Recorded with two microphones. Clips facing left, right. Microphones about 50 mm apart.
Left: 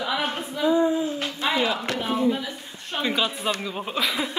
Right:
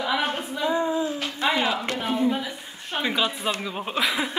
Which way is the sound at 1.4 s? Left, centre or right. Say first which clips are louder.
Right 1 dB; right.